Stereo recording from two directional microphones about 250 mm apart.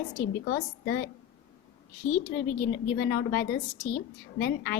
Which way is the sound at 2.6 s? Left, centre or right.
Left.